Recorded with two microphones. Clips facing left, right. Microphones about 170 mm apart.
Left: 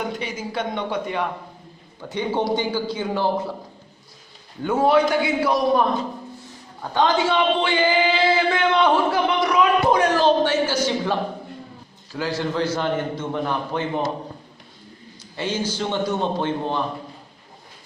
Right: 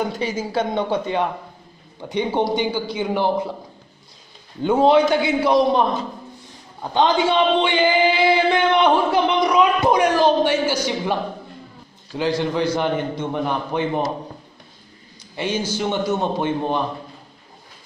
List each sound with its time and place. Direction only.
0.2 s speech: 30° right (ahead or behind)
2.0 s speech: 20° right (ahead or behind)
4.6 s a man's voice: 20° right (ahead or behind)
15.3 s a man's voice: 15° right (ahead or behind)